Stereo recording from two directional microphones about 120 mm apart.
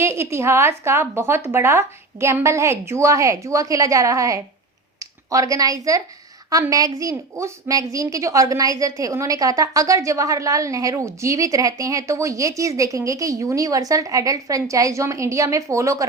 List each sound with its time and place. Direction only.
0.0 s a woman's voice: 20° right (ahead or behind)